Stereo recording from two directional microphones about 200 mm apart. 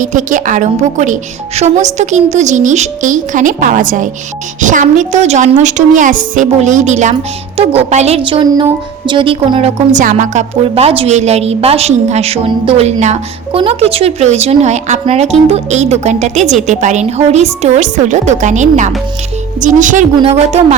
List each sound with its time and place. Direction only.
0.0 s a woman's voice: 40° right (ahead or behind)